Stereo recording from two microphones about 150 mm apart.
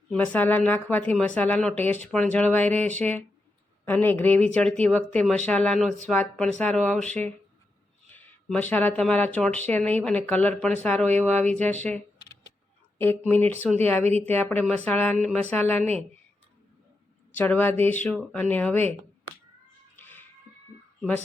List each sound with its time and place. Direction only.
0.1 s speech: 10° left (ahead or behind)
13.0 s speech: 15° left (ahead or behind)
14.0 s a woman's voice: 45° right (ahead or behind)
14.3 s speech: 10° left (ahead or behind)
15.8 s a woman's voice: 45° right (ahead or behind)
17.3 s speech: 10° left (ahead or behind)
20.0 s cat: 15° left (ahead or behind)